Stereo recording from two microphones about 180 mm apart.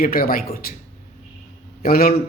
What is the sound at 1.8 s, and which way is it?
Speech, 55° left (ahead or behind).